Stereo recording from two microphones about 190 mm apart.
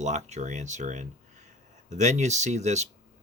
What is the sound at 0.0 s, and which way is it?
Speech, 35° right (ahead or behind).